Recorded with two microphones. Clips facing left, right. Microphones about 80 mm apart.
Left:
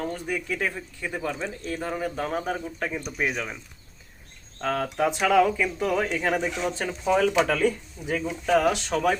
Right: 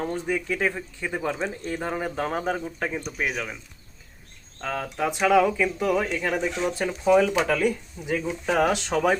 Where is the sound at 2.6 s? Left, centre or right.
Centre.